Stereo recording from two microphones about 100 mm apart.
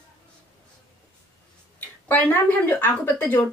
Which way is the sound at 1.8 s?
20° left (ahead or behind).